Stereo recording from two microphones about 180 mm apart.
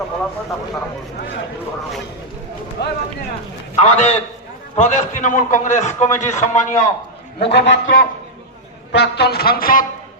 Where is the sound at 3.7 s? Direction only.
35° left (ahead or behind).